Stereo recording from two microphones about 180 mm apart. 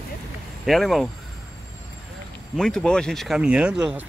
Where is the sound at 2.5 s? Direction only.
5° left (ahead or behind).